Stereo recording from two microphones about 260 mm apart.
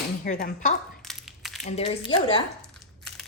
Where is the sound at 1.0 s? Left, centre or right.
Centre.